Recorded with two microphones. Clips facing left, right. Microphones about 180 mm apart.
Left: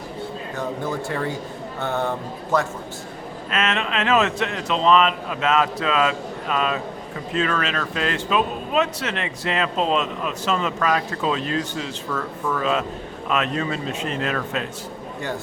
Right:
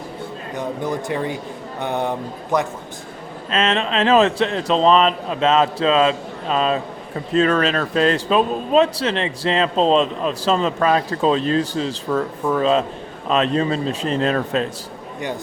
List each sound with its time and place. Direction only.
0.5 s speech: 15° right (ahead or behind)
3.5 s speech: 30° right (ahead or behind)